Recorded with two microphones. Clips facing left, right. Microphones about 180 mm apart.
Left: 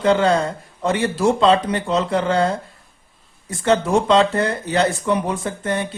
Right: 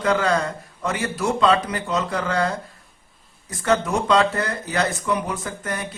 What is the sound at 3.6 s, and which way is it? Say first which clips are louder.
Speech: left 4 dB; 25° left (ahead or behind).